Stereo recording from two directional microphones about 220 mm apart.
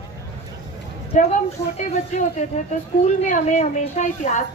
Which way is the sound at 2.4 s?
35° left (ahead or behind).